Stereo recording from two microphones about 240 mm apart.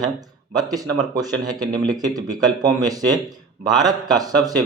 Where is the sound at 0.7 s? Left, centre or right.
Centre.